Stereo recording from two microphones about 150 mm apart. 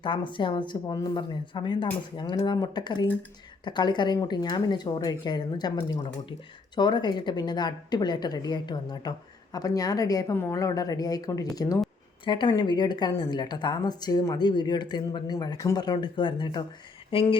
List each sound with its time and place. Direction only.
0.0 s a woman's voice: 35° left (ahead or behind)